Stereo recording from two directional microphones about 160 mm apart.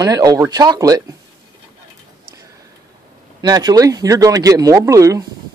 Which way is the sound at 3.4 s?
25° right (ahead or behind).